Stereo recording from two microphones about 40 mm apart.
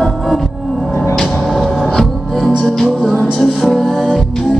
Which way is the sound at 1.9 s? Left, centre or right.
Centre.